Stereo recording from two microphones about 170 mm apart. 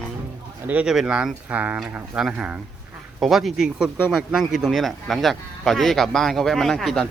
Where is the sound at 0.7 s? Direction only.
5° right (ahead or behind).